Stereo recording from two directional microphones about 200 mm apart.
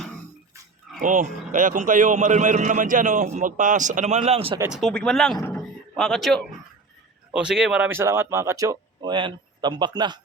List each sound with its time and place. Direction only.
1.0 s a man's voice: 40° right (ahead or behind)
4.6 s speech: centre (ahead or behind)
5.5 s a sound: centre (ahead or behind)
7.3 s speech: 5° right (ahead or behind); by 10.2 s 20° right (ahead or behind)